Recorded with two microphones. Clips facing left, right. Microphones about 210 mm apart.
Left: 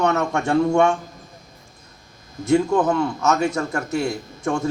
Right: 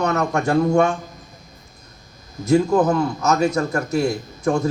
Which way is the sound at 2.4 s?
40° right (ahead or behind).